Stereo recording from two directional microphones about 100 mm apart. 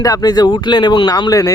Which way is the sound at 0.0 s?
40° left (ahead or behind).